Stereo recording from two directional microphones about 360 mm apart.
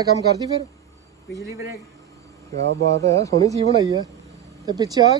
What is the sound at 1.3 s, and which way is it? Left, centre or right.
Speech, centre.